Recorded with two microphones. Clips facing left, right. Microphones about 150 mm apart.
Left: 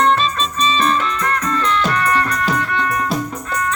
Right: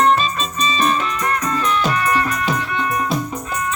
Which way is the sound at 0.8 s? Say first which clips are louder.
Left 1 dB; 15° right (ahead or behind).